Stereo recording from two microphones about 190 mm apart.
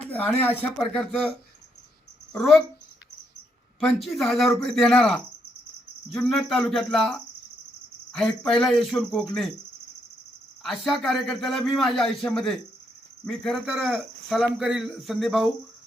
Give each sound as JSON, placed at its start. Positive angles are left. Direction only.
{"t": 0.1, "sound": "speech", "side_deg": 10}
{"t": 2.3, "sound": "speech", "side_deg": 0}
{"t": 3.8, "sound": "speech", "side_deg": 0}
{"t": 10.6, "sound": "speech", "side_deg": 0}